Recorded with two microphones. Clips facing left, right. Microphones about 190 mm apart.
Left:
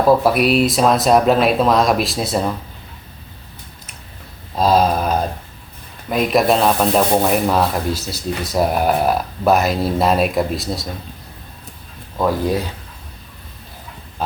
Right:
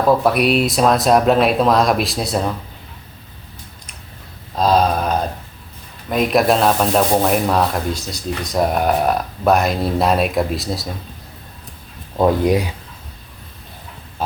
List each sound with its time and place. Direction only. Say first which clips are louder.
0.2 s rub: left 1 dB; centre (ahead or behind)
4.5 s a sound: left 1 dB; 5° left (ahead or behind)
6.1 s rub: even; centre (ahead or behind)
12.1 s speech: right 3 dB; 20° right (ahead or behind)